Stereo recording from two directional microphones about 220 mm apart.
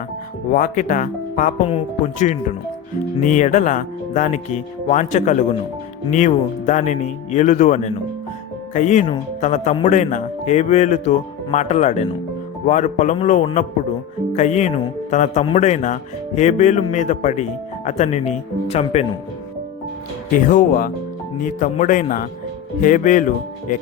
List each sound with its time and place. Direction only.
0.5 s speech: 35° left (ahead or behind)
20.3 s speech: 35° left (ahead or behind)